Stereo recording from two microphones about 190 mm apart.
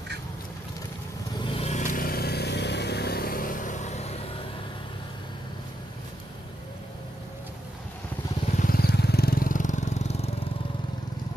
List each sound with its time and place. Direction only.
1.4 s vehicle: 30° left (ahead or behind)
8.5 s vehicle: 50° left (ahead or behind); by 10.3 s 35° left (ahead or behind)